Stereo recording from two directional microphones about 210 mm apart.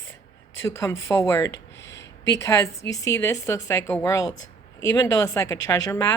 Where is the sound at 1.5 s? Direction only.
55° left (ahead or behind).